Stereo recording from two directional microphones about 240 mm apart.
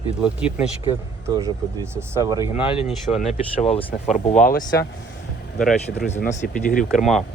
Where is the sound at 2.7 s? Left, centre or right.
Left.